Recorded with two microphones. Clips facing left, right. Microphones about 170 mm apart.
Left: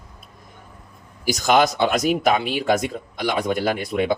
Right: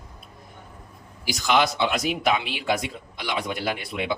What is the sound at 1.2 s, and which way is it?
Speech, 45° left (ahead or behind).